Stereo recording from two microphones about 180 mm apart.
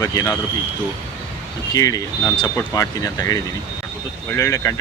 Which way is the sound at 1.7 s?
20° left (ahead or behind).